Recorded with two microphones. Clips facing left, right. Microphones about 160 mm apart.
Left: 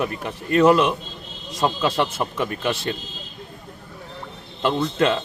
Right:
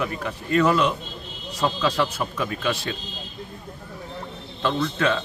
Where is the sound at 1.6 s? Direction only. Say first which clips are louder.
Left 2 dB; 25° left (ahead or behind).